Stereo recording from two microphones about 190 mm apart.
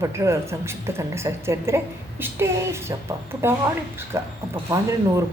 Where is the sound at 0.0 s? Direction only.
15° right (ahead or behind).